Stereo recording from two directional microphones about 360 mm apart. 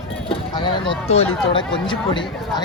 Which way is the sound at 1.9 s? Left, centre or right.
Centre.